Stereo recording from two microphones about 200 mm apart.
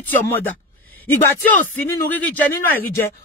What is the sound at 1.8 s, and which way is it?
Speech, 10° left (ahead or behind).